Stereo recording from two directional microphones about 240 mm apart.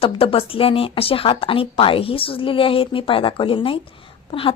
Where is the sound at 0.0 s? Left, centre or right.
Left.